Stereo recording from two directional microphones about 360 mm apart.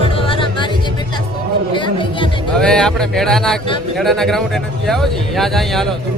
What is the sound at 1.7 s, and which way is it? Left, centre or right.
Music, centre.